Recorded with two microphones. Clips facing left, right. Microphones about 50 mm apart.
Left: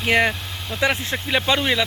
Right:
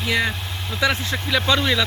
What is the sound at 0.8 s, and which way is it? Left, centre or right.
Speech, left.